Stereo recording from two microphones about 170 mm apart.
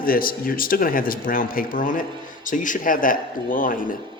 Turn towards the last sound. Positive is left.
turn(degrees=55)  # may be behind; listen again after turning